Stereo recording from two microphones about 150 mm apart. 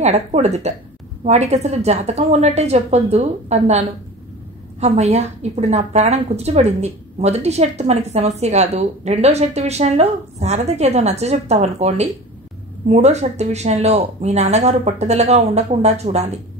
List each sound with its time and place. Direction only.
0.0 s a woman's voice: 45° right (ahead or behind)